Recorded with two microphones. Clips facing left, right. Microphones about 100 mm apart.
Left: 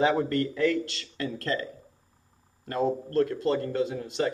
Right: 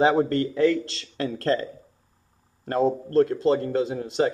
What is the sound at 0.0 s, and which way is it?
A man's voice, 30° right (ahead or behind).